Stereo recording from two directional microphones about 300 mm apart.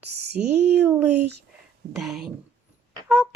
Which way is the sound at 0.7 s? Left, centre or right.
Centre.